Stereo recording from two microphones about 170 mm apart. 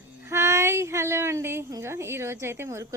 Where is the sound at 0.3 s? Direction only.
15° right (ahead or behind).